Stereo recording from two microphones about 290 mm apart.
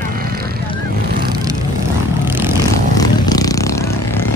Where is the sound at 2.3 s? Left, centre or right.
Centre.